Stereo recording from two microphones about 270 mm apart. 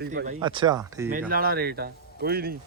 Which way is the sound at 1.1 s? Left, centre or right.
Right.